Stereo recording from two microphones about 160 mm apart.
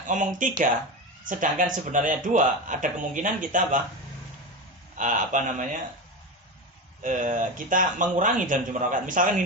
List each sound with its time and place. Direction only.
0.1 s a man's voice: 55° right (ahead or behind)
4.9 s speech: 50° right (ahead or behind)
7.0 s speech: 55° right (ahead or behind)